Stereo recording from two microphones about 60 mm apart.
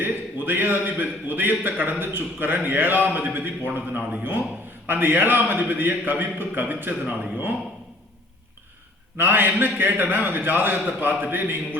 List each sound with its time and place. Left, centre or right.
0.0 s a man's voice: right
9.1 s a man's voice: right